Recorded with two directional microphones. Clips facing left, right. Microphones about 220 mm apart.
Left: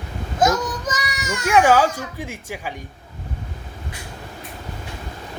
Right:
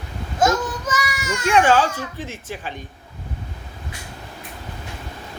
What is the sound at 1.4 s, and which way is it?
A woman's voice, 10° left (ahead or behind).